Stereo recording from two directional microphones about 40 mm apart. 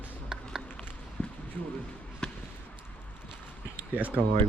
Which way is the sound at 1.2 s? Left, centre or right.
Left.